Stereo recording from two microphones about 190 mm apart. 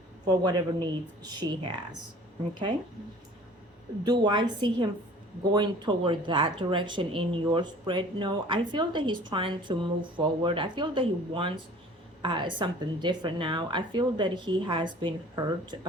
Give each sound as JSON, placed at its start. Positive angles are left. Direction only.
{"t": 0.3, "sound": "speech", "side_deg": -25}
{"t": 4.0, "sound": "speech", "side_deg": -25}